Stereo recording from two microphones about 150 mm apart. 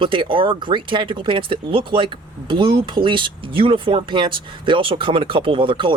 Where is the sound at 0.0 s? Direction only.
35° right (ahead or behind).